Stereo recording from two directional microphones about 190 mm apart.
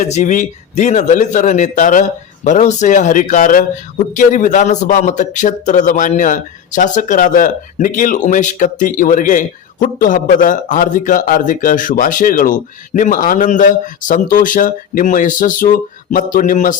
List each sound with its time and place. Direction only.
0.0 s a man's voice: 40° left (ahead or behind)